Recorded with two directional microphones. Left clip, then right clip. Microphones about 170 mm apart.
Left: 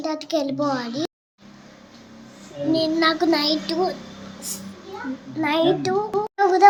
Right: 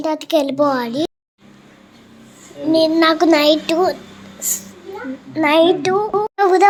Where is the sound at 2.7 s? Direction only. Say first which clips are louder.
Right 7 dB; 30° right (ahead or behind).